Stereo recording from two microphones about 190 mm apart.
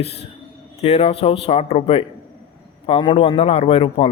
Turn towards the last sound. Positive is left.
turn(degrees=30)  # may be behind; listen again after turning